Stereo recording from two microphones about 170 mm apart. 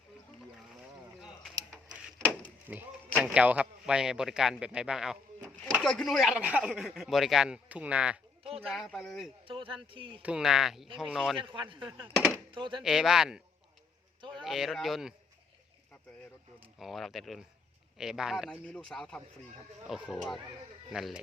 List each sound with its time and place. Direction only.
1.9 s a sound: 5° left (ahead or behind)
2.7 s a man's voice: 10° right (ahead or behind)
9.5 s speech: 30° right (ahead or behind)
10.2 s speech: 5° right (ahead or behind)
11.3 s speech: 30° right (ahead or behind)
12.1 s a sound: centre (ahead or behind)
12.5 s speech: 30° right (ahead or behind)
12.8 s speech: centre (ahead or behind)
14.2 s a sound: 30° right (ahead or behind)
14.4 s speech: centre (ahead or behind)
16.6 s speech: centre (ahead or behind)